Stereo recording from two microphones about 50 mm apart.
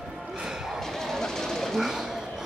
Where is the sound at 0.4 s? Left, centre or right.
Centre.